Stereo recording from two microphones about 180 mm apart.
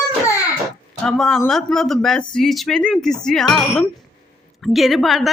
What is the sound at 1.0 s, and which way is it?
Speech, centre (ahead or behind).